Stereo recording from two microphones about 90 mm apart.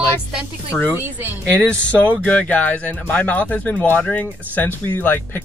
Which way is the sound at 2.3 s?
15° left (ahead or behind).